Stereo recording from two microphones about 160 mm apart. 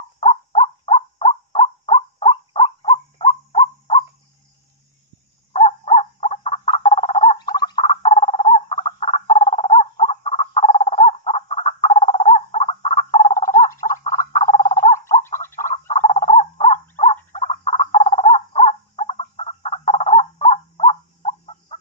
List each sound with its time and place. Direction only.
0.2 s a sound: 40° left (ahead or behind)
5.5 s bird: 35° left (ahead or behind)
13.3 s frog: 50° left (ahead or behind)
15.9 s bird: 45° left (ahead or behind)
16.9 s frog: 50° left (ahead or behind)